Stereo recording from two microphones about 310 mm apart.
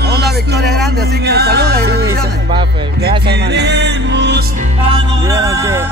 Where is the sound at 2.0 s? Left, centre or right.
Centre.